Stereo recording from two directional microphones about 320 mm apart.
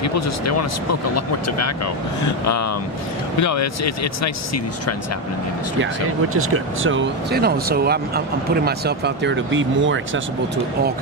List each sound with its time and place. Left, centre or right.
0.0 s speech: left
2.2 s speech: left
6.3 s speech: right